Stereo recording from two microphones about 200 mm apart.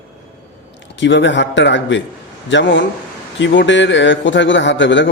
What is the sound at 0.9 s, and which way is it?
A man's voice, 65° left (ahead or behind).